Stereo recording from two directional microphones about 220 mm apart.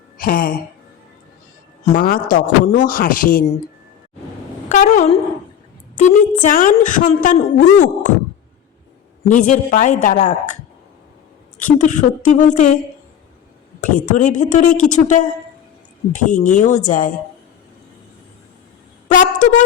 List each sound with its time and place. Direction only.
0.2 s a sound: 40° left (ahead or behind)
1.8 s a woman's voice: 35° left (ahead or behind)
4.7 s a woman's voice: 35° left (ahead or behind)
9.2 s a woman's voice: 35° left (ahead or behind)
11.6 s a woman's voice: 35° left (ahead or behind)
14.2 s a woman's voice: 35° left (ahead or behind)
19.0 s a sound: 35° left (ahead or behind)